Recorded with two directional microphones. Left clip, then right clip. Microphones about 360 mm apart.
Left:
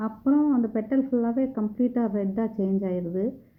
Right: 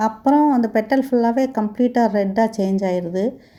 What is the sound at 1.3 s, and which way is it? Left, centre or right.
Speech, right.